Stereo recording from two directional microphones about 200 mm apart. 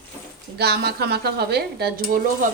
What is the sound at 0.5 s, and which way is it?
A woman's voice, 50° right (ahead or behind).